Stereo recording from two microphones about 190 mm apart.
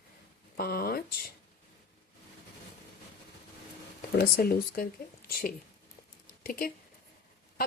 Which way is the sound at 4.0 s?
55° left (ahead or behind).